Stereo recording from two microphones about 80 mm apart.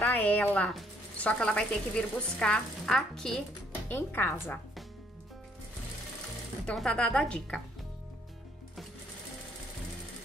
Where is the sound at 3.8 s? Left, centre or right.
Left.